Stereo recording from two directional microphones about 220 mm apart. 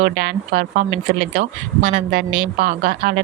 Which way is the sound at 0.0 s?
50° right (ahead or behind).